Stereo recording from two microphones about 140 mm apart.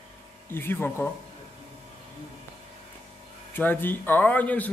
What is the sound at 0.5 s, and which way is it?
Speech, 15° left (ahead or behind).